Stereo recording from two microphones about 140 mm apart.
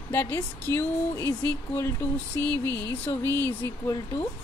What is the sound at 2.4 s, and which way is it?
Mantra, 25° right (ahead or behind).